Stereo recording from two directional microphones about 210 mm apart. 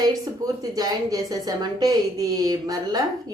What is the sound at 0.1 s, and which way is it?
A woman's voice, 15° right (ahead or behind).